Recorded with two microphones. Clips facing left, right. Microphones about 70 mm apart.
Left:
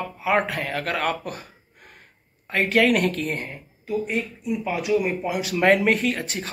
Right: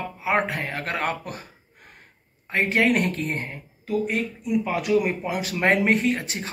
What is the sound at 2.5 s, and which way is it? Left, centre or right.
Speech, right.